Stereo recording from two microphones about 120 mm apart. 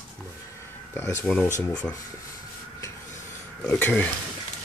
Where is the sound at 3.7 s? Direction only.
15° left (ahead or behind).